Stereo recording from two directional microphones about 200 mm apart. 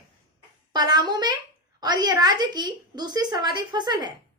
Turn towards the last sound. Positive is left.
turn(degrees=-20)  # may be behind; listen again after turning